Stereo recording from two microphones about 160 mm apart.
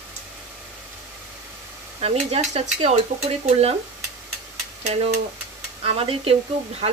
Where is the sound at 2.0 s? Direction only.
40° right (ahead or behind).